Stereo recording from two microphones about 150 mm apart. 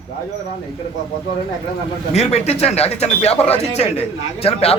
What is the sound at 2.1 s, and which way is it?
A man's voice, 45° left (ahead or behind).